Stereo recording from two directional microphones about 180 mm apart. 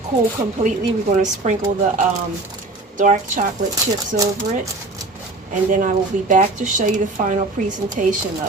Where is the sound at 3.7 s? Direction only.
20° right (ahead or behind).